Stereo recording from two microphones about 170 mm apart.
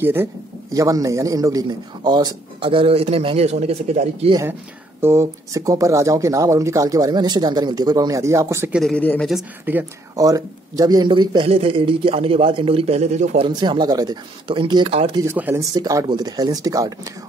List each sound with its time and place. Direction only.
0.0 s a man's voice: 15° right (ahead or behind); by 4.3 s 40° right (ahead or behind)
4.3 s a man's voice: 20° right (ahead or behind)
8.7 s speech: 5° left (ahead or behind)
9.3 s speech: 10° right (ahead or behind); by 13.5 s 40° right (ahead or behind)
13.5 s a man's voice: 25° right (ahead or behind)
15.1 s a man's voice: 15° right (ahead or behind)